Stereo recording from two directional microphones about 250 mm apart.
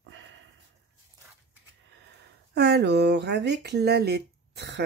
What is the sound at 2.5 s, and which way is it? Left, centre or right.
Speech, right.